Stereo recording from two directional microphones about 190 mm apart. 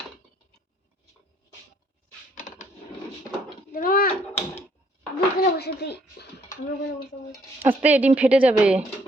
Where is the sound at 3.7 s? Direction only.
50° left (ahead or behind).